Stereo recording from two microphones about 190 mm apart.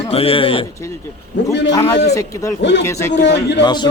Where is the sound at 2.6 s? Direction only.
65° left (ahead or behind).